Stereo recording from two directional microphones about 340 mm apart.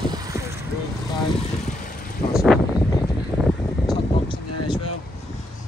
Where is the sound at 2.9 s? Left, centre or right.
Centre.